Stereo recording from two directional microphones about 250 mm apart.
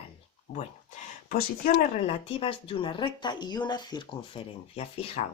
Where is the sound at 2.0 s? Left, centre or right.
Left.